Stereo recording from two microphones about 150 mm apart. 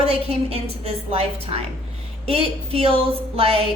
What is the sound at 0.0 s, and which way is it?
A woman's voice, 40° right (ahead or behind).